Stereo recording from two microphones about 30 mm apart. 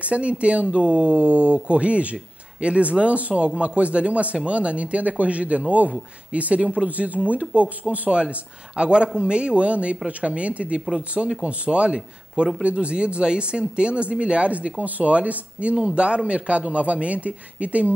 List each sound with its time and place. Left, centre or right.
0.0 s a man's voice: right
6.9 s speech: right
8.1 s a man's voice: right
14.8 s speech: right
15.7 s a man's voice: right